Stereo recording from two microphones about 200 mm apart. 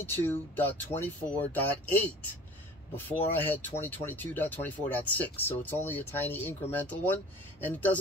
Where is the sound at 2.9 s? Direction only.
10° left (ahead or behind).